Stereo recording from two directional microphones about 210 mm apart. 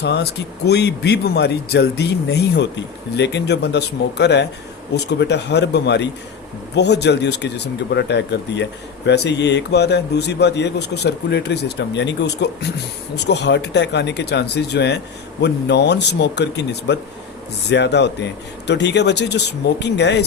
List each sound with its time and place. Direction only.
0.0 s speech: 55° left (ahead or behind)